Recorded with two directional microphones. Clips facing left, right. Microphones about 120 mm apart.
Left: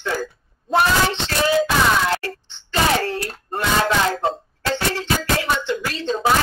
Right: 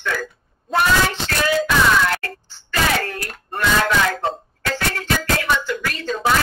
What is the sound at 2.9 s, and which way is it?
Hands, 30° left (ahead or behind).